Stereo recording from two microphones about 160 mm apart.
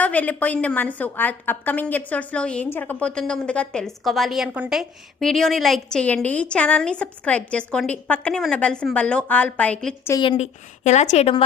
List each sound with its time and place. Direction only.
0.0 s a woman's voice: 10° left (ahead or behind)
10.2 s a woman's voice: 35° left (ahead or behind)